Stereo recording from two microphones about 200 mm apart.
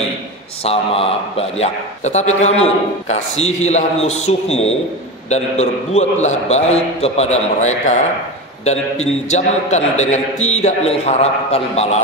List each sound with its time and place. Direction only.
0.7 s a man's voice: 30° left (ahead or behind)